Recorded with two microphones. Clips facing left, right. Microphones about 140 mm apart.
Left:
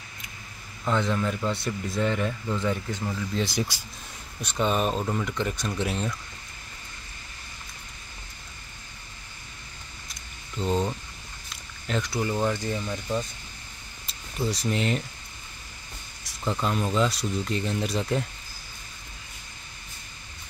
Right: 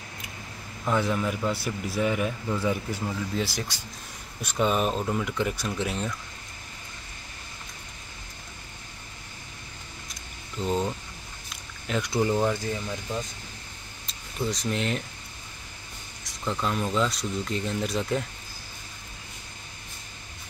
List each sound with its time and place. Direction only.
0.8 s speech: 10° right (ahead or behind)
10.6 s speech: centre (ahead or behind)
12.1 s speech: 15° right (ahead or behind)
14.4 s speech: 5° left (ahead or behind)
16.3 s speech: 5° left (ahead or behind)